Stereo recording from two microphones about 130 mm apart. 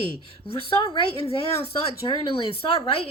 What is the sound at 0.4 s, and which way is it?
Speech, 45° left (ahead or behind).